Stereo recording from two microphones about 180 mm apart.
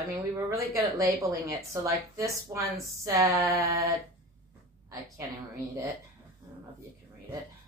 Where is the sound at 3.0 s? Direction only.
20° right (ahead or behind).